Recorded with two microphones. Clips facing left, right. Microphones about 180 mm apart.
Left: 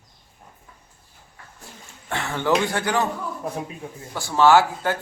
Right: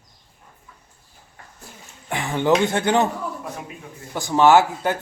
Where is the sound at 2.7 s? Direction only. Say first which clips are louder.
Right 4 dB; 25° right (ahead or behind).